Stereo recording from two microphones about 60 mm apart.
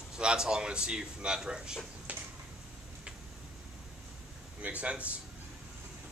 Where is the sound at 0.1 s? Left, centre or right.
Centre.